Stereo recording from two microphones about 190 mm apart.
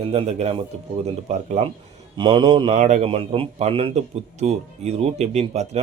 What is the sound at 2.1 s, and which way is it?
Speech, 25° right (ahead or behind).